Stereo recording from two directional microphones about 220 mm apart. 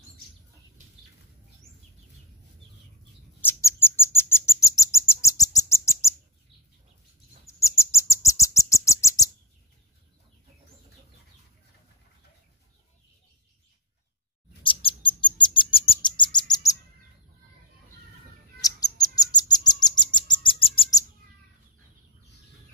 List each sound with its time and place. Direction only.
3.3 s bird: 10° left (ahead or behind)
7.4 s bird: 15° left (ahead or behind)
14.6 s bird: 25° left (ahead or behind)
18.6 s bird: 15° left (ahead or behind)